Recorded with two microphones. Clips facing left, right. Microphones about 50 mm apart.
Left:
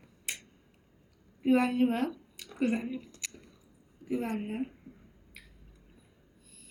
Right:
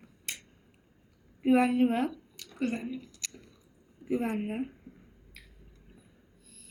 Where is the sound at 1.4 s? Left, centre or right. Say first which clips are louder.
Right 2 dB; centre.